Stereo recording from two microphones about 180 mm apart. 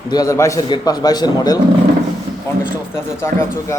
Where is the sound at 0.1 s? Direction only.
20° left (ahead or behind).